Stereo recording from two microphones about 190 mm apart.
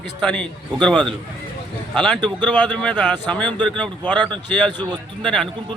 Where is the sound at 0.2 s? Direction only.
5° left (ahead or behind).